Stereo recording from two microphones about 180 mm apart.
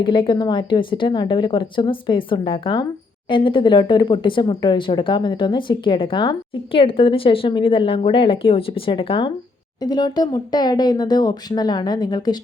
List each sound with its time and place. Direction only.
0.0 s speech: 25° left (ahead or behind)